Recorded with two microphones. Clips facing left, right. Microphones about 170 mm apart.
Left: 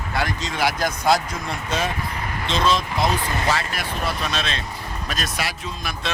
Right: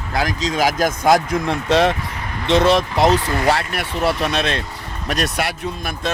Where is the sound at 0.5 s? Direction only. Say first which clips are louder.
Right 5 dB; 45° right (ahead or behind).